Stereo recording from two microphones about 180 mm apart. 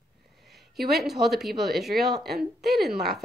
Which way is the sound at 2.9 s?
60° right (ahead or behind).